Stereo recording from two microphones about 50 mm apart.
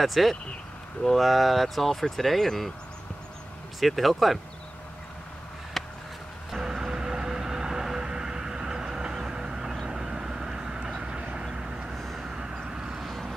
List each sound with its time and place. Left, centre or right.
0.0 s speech: centre
3.8 s speech: centre
5.8 s a sound: centre
6.5 s vehicle: centre
11.9 s vehicle: centre
12.2 s vehicle: centre
13.0 s vehicle: centre